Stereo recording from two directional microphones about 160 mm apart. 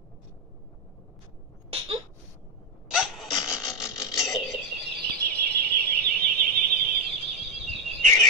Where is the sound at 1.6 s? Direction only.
40° right (ahead or behind).